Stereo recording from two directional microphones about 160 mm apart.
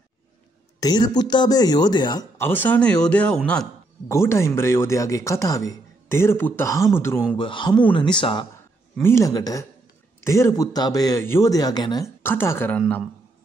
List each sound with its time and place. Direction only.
0.7 s speech: 25° left (ahead or behind)
2.3 s speech: 15° left (ahead or behind)
4.1 s speech: 20° left (ahead or behind)
7.3 s speech: 30° left (ahead or behind)
9.0 s speech: 20° left (ahead or behind)